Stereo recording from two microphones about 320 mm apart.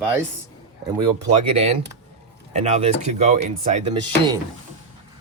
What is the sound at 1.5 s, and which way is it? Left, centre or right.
Speech, centre.